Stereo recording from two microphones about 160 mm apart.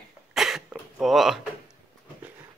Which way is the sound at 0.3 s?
Centre (ahead or behind).